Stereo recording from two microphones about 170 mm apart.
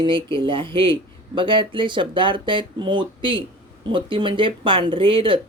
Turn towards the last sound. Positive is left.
turn(degrees=-30)  # may be behind; listen again after turning